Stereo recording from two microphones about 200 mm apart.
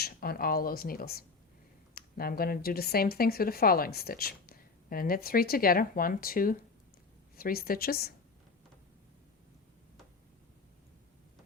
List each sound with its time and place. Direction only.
0.0 s speech: 50° left (ahead or behind)